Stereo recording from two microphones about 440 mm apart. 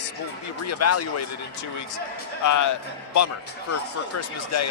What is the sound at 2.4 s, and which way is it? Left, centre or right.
Speech, left.